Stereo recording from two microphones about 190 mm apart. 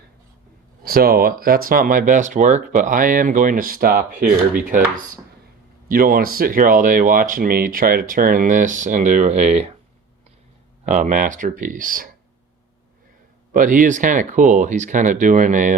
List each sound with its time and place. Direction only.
0.9 s speech: 50° right (ahead or behind)
5.9 s speech: 50° right (ahead or behind)
10.8 s speech: 40° right (ahead or behind)
13.5 s speech: 45° right (ahead or behind)